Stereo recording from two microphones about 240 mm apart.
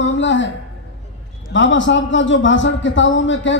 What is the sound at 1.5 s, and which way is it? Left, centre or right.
A man's voice, left.